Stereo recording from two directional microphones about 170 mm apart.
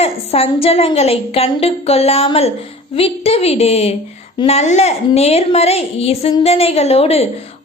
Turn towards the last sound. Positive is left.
turn(degrees=35)  # may be behind; listen again after turning